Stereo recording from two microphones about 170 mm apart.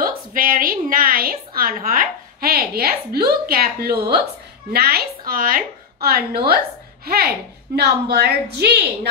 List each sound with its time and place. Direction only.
0.0 s a woman's voice: 55° right (ahead or behind)
7.7 s a woman's voice: 70° right (ahead or behind)